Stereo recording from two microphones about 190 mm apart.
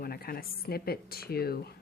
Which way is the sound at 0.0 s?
50° left (ahead or behind).